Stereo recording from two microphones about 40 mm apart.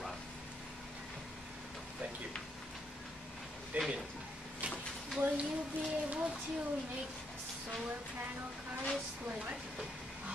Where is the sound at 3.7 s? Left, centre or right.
Right.